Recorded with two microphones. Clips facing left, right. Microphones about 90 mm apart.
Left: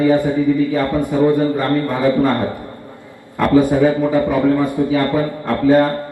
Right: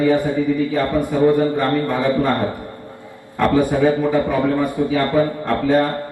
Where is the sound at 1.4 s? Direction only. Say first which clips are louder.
Left 1 dB; 20° right (ahead or behind).